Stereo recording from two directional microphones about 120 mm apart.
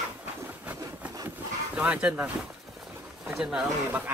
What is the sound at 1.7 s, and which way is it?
Speech, 10° right (ahead or behind).